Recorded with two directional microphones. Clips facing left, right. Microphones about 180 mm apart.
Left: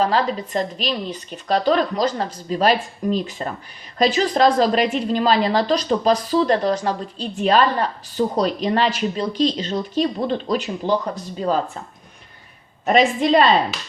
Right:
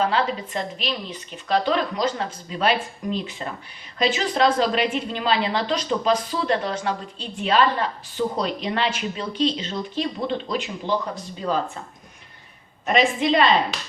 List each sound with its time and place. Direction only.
0.0 s a woman's voice: 40° left (ahead or behind)
12.8 s a woman's voice: 40° left (ahead or behind)